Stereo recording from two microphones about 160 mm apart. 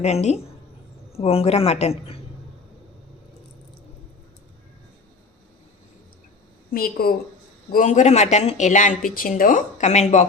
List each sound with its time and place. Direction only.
0.0 s speech: 45° left (ahead or behind)
6.7 s a woman's voice: 65° left (ahead or behind)
7.7 s speech: 55° left (ahead or behind)